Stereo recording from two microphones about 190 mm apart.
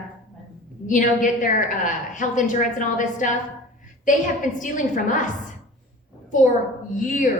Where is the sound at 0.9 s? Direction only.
40° left (ahead or behind).